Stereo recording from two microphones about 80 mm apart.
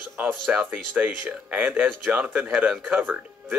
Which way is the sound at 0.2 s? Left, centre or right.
Centre.